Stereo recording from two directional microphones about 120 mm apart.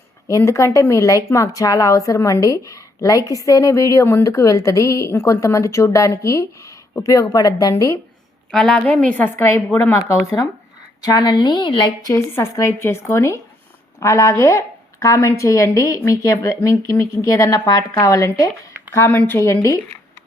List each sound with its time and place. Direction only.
0.3 s speech: 25° left (ahead or behind)
8.4 s a woman's voice: 5° left (ahead or behind); by 12.1 s 40° left (ahead or behind)
12.1 s speech: 25° left (ahead or behind)